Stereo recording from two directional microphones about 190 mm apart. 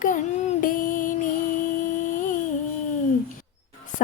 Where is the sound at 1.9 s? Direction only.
45° left (ahead or behind).